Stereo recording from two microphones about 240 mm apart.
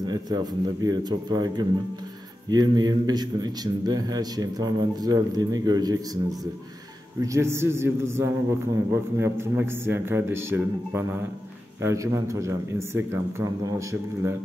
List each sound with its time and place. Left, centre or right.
0.0 s a man's voice: centre
7.2 s a man's voice: centre